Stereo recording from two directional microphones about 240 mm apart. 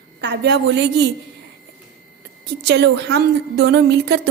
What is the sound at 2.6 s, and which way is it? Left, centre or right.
A woman's voice, right.